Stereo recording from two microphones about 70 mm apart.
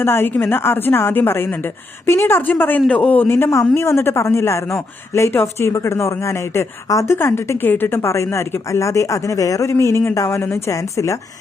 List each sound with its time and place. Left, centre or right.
0.0 s speech: left
2.5 s a man's voice: left
6.8 s speech: left
7.1 s speech: left
7.6 s speech: left
9.7 s speech: left